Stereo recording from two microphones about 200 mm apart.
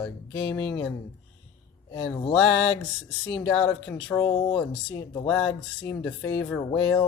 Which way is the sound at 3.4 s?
5° left (ahead or behind).